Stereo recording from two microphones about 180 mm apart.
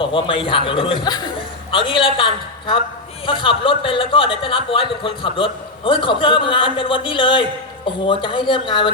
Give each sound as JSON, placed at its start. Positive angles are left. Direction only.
{"t": 0.0, "sound": "a man's voice", "side_deg": 30}